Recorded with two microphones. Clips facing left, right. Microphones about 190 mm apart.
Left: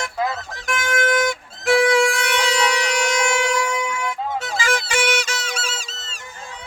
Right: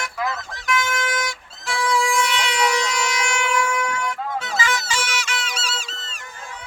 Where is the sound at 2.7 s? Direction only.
70° left (ahead or behind).